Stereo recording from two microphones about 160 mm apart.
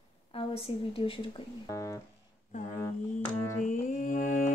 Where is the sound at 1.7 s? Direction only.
20° left (ahead or behind).